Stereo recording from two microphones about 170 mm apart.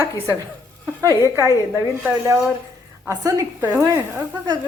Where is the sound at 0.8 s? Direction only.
15° right (ahead or behind).